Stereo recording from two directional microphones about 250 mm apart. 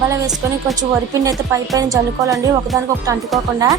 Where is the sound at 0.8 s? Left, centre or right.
Centre.